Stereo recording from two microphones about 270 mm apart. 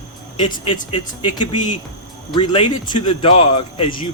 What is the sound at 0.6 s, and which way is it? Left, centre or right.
Speech, centre.